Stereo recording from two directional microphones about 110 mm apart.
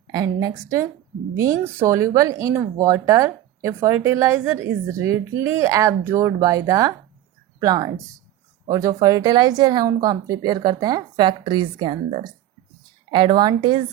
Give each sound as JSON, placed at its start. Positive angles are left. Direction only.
{"t": 0.1, "sound": "a woman's voice", "side_deg": -35}
{"t": 13.1, "sound": "a woman's voice", "side_deg": -45}